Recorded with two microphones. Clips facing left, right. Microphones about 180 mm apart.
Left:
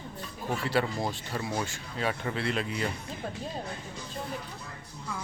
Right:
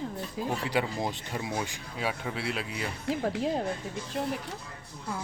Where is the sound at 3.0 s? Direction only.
80° right.